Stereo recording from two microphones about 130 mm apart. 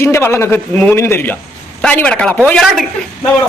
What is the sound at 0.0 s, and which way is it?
A man's voice, 20° left (ahead or behind).